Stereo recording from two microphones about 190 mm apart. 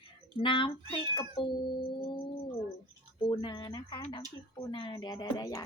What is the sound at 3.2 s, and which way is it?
A woman's voice, 25° left (ahead or behind).